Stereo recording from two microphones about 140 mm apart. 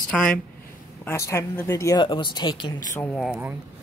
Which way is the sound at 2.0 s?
35° left (ahead or behind).